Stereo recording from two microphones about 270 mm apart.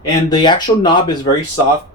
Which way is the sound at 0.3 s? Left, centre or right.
Centre.